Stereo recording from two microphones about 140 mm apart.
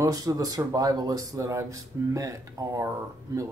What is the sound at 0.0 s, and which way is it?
Speech, 25° right (ahead or behind).